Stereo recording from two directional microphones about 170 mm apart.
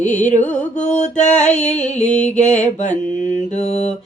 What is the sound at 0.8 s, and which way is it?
Mantra, 45° left (ahead or behind).